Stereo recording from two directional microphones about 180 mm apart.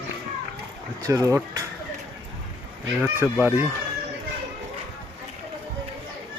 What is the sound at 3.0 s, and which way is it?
Speech, 10° right (ahead or behind).